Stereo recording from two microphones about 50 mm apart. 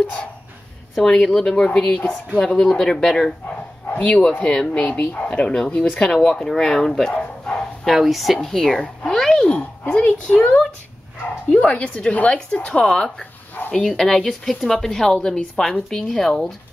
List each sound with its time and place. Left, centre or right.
1.0 s a woman's voice: centre
3.9 s bow-wow: left
4.3 s a woman's voice: left
7.8 s speech: centre
8.4 s speech: centre
9.5 s speech: left
10.3 s a woman's voice: left; by 16.5 s centre